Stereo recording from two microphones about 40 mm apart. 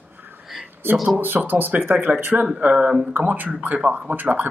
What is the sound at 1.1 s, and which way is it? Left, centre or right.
Speech, right.